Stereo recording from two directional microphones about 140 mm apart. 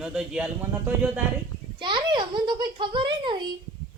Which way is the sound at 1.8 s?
35° right (ahead or behind).